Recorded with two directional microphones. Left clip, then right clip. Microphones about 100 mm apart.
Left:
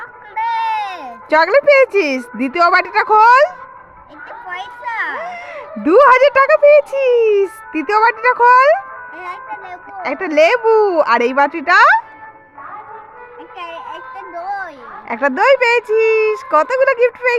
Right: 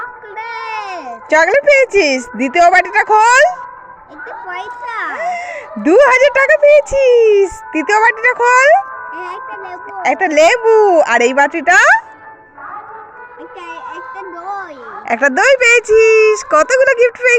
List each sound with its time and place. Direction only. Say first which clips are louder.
0.4 s a sound: left 5 dB; 90° left
1.3 s a woman's voice: right 1 dB; 5° left (ahead or behind)
5.1 s speech: right 6 dB; 5° left (ahead or behind)
10.0 s a woman's voice: right 3 dB; centre (ahead or behind)
15.0 s speech: right 2 dB; 15° right (ahead or behind)